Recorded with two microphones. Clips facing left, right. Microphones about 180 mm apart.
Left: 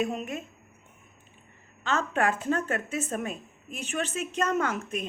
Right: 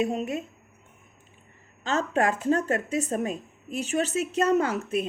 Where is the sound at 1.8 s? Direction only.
40° right (ahead or behind).